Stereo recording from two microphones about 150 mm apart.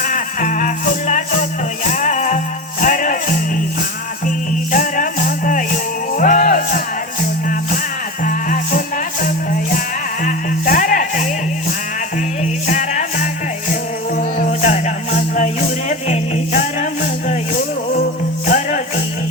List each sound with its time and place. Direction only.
0.0 s music: 60° left (ahead or behind)
4.7 s music: 65° left (ahead or behind)
8.2 s music: 65° left (ahead or behind)
10.2 s music: 60° left (ahead or behind)
12.6 s music: 55° left (ahead or behind)
14.2 s music: 75° left (ahead or behind); by 18.8 s 55° left (ahead or behind)